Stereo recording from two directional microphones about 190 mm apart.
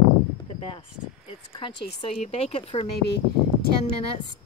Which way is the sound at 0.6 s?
30° left (ahead or behind).